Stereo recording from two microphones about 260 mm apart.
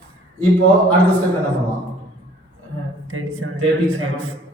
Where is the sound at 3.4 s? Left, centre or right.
Right.